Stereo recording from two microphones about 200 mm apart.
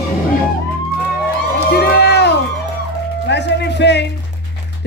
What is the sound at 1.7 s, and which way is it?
Run, 55° left (ahead or behind).